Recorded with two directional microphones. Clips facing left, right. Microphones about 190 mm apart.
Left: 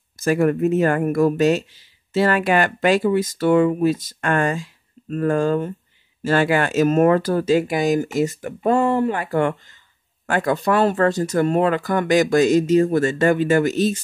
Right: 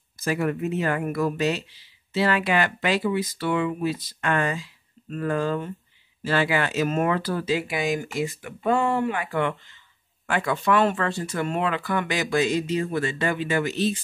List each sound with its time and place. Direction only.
0.2 s speech: 50° left (ahead or behind)